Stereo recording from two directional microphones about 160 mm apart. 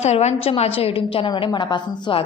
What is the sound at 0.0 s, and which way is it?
A woman's voice, 45° left (ahead or behind).